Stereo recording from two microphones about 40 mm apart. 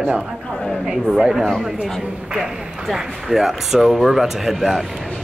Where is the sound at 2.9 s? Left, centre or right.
Centre.